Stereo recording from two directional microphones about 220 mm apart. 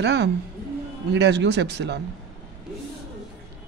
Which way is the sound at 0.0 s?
50° right (ahead or behind).